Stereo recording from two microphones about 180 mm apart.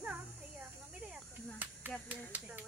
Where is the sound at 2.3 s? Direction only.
10° right (ahead or behind).